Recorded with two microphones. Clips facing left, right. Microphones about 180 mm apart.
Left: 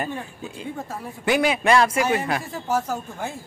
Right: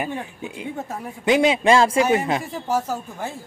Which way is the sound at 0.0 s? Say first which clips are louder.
Right 2 dB; 20° right (ahead or behind).